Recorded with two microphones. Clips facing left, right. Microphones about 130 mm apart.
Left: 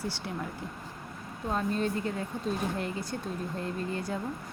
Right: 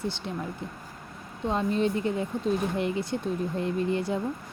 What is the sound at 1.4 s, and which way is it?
Speech, 5° left (ahead or behind).